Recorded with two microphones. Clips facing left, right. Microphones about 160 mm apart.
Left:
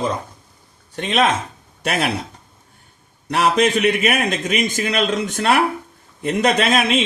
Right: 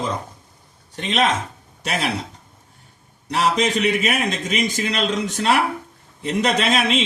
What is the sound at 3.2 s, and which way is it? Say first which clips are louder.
A man's voice: left 3 dB; 60° left (ahead or behind).